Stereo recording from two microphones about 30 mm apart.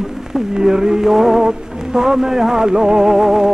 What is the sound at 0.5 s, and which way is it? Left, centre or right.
Music, right.